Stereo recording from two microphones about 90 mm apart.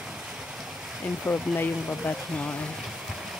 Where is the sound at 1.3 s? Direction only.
20° left (ahead or behind).